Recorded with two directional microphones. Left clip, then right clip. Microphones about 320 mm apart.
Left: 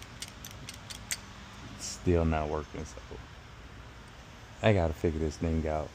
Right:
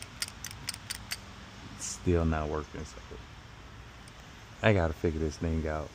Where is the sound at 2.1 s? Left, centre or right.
Centre.